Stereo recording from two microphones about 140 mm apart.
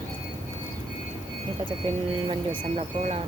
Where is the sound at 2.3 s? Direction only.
45° right (ahead or behind).